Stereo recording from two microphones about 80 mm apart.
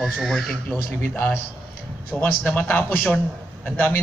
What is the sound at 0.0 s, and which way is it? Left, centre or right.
Speech, centre.